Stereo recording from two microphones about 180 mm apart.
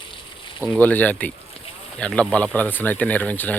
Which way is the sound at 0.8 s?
10° left (ahead or behind).